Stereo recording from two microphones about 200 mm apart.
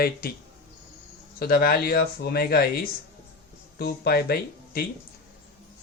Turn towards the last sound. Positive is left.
turn(degrees=50)  # may be behind; listen again after turning